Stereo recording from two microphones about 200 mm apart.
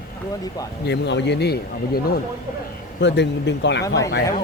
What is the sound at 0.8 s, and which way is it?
Speech, 60° left (ahead or behind).